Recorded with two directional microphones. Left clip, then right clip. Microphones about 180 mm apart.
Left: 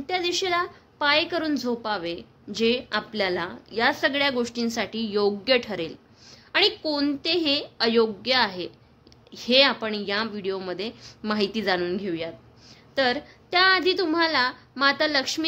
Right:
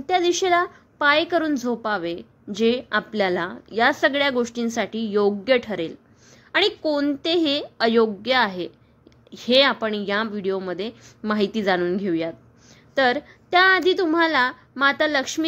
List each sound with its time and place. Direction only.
0.0 s a woman's voice: 35° right (ahead or behind)